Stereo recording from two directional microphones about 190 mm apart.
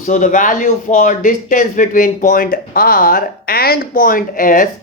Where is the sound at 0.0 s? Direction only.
40° left (ahead or behind).